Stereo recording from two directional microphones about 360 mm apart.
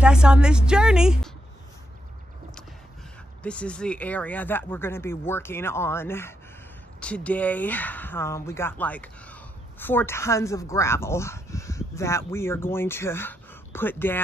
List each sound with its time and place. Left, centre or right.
0.0 s a woman's voice: centre
3.4 s speech: centre